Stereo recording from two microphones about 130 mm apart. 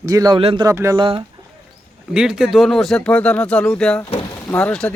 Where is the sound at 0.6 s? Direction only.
20° right (ahead or behind).